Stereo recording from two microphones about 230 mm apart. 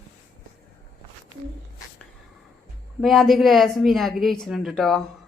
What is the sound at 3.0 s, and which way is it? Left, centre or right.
Speech, centre.